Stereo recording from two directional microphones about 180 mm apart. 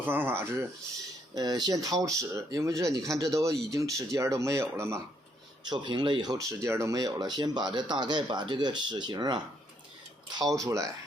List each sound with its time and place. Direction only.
0.0 s speech: 10° right (ahead or behind)
1.4 s speech: 20° right (ahead or behind)
5.6 s speech: 25° right (ahead or behind)